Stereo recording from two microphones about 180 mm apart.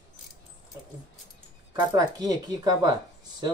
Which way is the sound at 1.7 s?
20° right (ahead or behind).